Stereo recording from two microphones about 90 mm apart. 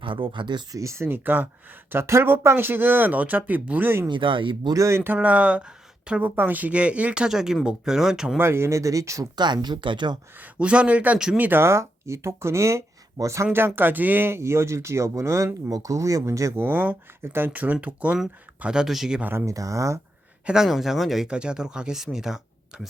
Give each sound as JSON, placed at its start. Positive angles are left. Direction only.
{"t": 0.0, "sound": "speech", "side_deg": -65}
{"t": 0.7, "sound": "speech", "side_deg": -35}
{"t": 4.1, "sound": "speech", "side_deg": -70}
{"t": 4.7, "sound": "speech", "side_deg": -35}
{"t": 8.4, "sound": "speech", "side_deg": -30}
{"t": 9.4, "sound": "speech", "side_deg": -55}
{"t": 10.3, "sound": "speech", "side_deg": -15}
{"t": 16.6, "sound": "speech", "side_deg": -20}
{"t": 19.2, "sound": "speech", "side_deg": -20}
{"t": 19.5, "sound": "speech", "side_deg": -40}
{"t": 20.5, "sound": "speech", "side_deg": -5}